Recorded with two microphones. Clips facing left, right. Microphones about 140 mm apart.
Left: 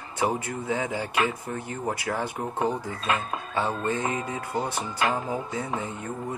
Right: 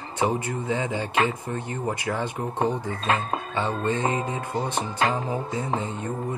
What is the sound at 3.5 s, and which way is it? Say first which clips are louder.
Speech: even; 10° left (ahead or behind).